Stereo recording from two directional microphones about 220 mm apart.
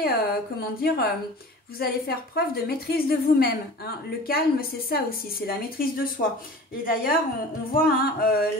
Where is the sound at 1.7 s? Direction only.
45° left (ahead or behind).